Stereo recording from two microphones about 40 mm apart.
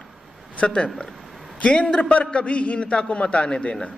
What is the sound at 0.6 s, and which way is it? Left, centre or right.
A man's voice, left.